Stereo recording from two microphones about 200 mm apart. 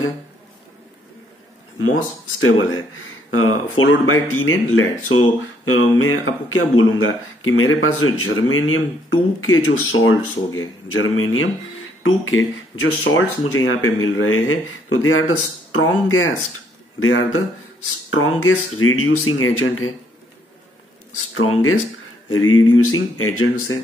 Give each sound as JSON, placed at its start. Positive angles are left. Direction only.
{"t": 2.4, "sound": "speech", "side_deg": 85}
{"t": 21.3, "sound": "speech", "side_deg": 85}